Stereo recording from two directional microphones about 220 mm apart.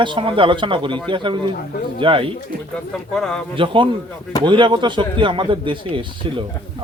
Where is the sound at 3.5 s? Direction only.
25° right (ahead or behind).